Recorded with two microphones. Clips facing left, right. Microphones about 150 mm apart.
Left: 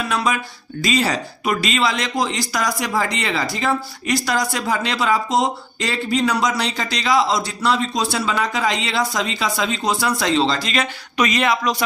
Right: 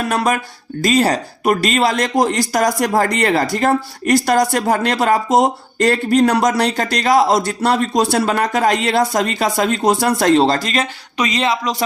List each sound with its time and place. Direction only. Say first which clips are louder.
0.0 s speech: right 4 dB; 50° right (ahead or behind)
11.2 s speech: even; 25° right (ahead or behind)